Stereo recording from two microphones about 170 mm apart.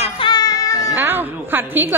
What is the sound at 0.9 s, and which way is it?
A woman's voice, 10° right (ahead or behind).